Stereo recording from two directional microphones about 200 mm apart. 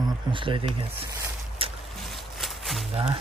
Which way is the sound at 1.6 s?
30° right (ahead or behind).